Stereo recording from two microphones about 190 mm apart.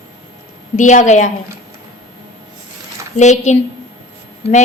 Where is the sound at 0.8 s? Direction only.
40° left (ahead or behind).